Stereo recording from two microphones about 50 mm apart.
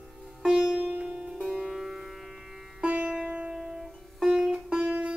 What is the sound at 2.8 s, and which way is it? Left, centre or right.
Music, right.